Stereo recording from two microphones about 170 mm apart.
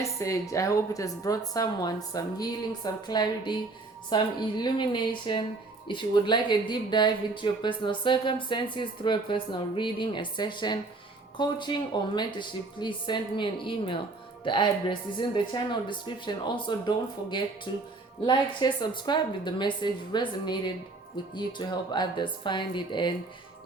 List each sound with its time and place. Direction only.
0.2 s a woman's voice: 20° left (ahead or behind)